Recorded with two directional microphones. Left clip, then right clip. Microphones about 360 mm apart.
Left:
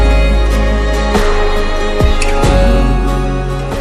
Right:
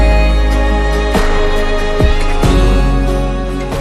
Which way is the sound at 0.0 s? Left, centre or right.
Centre.